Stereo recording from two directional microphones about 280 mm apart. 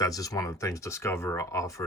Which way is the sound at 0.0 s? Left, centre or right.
Centre.